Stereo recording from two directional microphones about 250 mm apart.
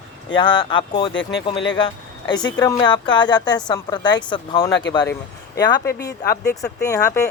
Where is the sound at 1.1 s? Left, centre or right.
Left.